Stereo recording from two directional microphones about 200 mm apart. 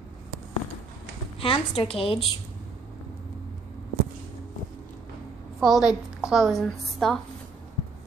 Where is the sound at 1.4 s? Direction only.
25° left (ahead or behind).